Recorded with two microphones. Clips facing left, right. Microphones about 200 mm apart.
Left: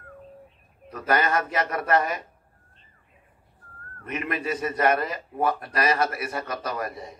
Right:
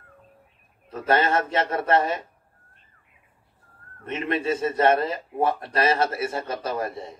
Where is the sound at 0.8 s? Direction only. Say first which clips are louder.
Right 2 dB; 25° right (ahead or behind).